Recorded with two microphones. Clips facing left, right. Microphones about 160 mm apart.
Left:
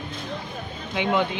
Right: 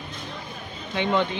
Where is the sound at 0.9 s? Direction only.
10° left (ahead or behind).